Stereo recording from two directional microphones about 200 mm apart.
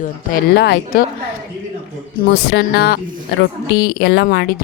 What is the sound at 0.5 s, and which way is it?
Speech, 55° left (ahead or behind).